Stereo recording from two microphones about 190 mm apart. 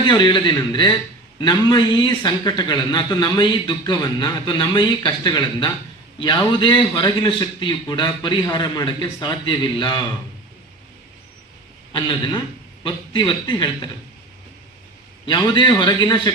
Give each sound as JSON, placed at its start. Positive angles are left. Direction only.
{"t": 0.0, "sound": "a man's voice", "side_deg": 25}
{"t": 11.9, "sound": "a man's voice", "side_deg": 25}
{"t": 15.3, "sound": "a man's voice", "side_deg": 25}